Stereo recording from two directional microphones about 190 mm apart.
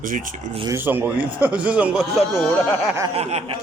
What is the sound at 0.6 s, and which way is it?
A man's voice, 10° right (ahead or behind).